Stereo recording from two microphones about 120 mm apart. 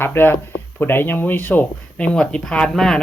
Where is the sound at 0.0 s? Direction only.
20° left (ahead or behind).